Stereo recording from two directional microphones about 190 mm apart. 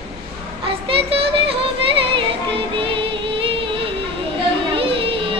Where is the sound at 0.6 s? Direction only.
30° right (ahead or behind).